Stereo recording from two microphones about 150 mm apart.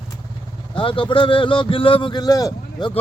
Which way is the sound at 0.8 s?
35° left (ahead or behind).